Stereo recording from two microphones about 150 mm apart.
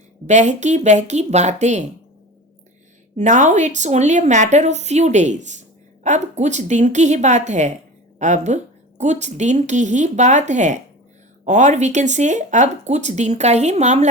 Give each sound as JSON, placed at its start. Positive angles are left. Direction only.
{"t": 0.3, "sound": "a woman's voice", "side_deg": -50}
{"t": 3.2, "sound": "a woman's voice", "side_deg": -55}